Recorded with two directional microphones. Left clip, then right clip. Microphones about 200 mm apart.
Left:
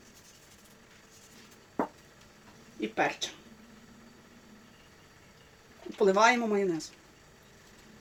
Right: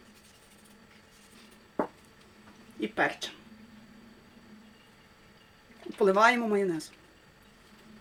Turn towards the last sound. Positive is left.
turn(degrees=-10)  # may be behind; listen again after turning